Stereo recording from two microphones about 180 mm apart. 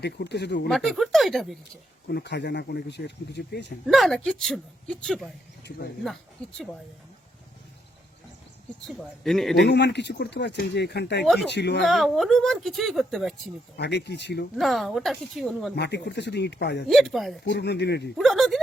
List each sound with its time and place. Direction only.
0.0 s speech: 65° left (ahead or behind)
0.7 s speech: centre (ahead or behind)
2.0 s speech: 70° left (ahead or behind)
3.8 s speech: centre (ahead or behind)
6.4 s speech: 5° left (ahead or behind)
8.9 s speech: centre (ahead or behind)
9.6 s speech: 70° left (ahead or behind)
11.9 s speech: centre (ahead or behind)
13.7 s speech: 70° left (ahead or behind)
14.5 s speech: centre (ahead or behind)
15.7 s speech: 65° left (ahead or behind)
16.9 s speech: centre (ahead or behind)
17.4 s speech: 70° left (ahead or behind)
18.2 s speech: centre (ahead or behind)